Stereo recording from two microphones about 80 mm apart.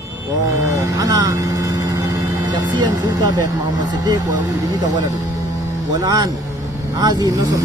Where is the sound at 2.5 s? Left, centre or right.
Right.